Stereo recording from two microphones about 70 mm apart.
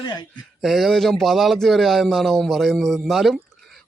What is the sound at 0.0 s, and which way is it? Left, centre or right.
Speech, left.